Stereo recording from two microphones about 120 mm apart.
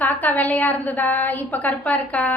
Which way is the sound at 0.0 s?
15° left (ahead or behind).